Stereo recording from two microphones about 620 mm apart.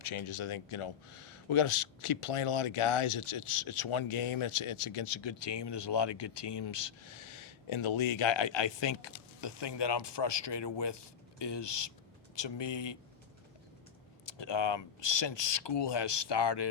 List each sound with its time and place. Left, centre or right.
0.0 s a man's voice: left
14.3 s a man's voice: left